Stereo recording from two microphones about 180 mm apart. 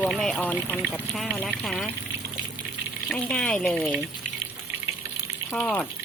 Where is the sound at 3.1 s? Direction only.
5° left (ahead or behind).